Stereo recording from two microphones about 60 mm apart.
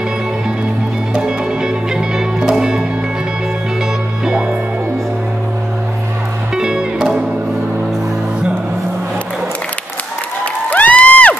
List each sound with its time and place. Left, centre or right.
1.1 s music: centre
4.2 s music: centre
6.5 s music: centre
10.4 s cheering: left